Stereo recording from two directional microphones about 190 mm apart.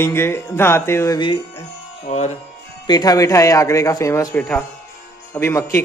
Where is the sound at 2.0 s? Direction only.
35° left (ahead or behind).